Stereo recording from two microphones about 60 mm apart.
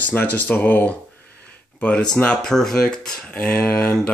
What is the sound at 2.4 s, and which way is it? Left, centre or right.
Speech, centre.